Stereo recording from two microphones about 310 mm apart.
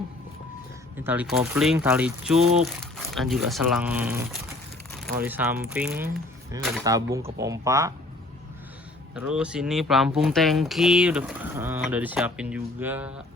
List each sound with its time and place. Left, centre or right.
0.9 s speech: centre
2.4 s speech: right
2.8 s speech: centre
9.1 s speech: centre